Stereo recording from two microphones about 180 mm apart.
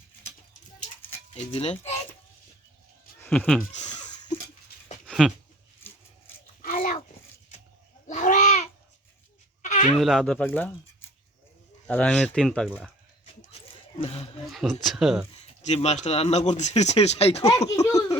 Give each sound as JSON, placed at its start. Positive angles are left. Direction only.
{"t": 1.5, "sound": "speech", "side_deg": 35}
{"t": 3.2, "sound": "speech", "side_deg": 5}
{"t": 5.0, "sound": "a sound", "side_deg": 0}
{"t": 6.6, "sound": "a sound", "side_deg": 50}
{"t": 8.0, "sound": "babbling", "side_deg": 45}
{"t": 9.6, "sound": "bleat", "side_deg": 45}
{"t": 9.9, "sound": "speech", "side_deg": 0}
{"t": 11.9, "sound": "speech", "side_deg": 10}
{"t": 14.5, "sound": "speech", "side_deg": 0}
{"t": 15.6, "sound": "speech", "side_deg": 40}
{"t": 17.7, "sound": "a sound", "side_deg": 20}